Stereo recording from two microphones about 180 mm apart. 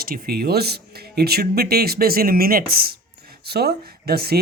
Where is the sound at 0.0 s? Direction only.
55° right (ahead or behind).